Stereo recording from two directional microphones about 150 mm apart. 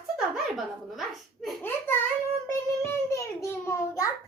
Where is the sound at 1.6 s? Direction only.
15° left (ahead or behind).